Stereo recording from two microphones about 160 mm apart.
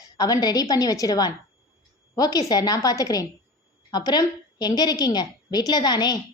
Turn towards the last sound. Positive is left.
turn(degrees=25)  # may be behind; listen again after turning